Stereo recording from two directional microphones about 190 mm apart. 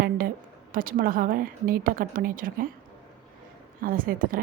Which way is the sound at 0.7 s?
45° right (ahead or behind).